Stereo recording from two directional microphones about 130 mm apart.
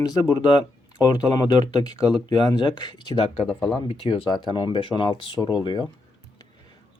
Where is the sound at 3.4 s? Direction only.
5° left (ahead or behind).